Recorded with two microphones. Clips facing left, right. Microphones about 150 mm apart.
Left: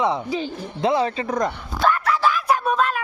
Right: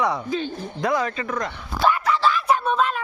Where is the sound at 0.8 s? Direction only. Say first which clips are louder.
Left 3 dB; 25° left (ahead or behind).